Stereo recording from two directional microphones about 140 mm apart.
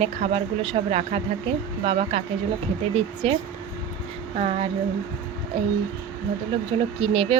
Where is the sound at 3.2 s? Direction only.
45° right (ahead or behind).